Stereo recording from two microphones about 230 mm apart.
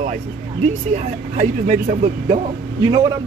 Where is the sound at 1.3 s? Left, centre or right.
Right.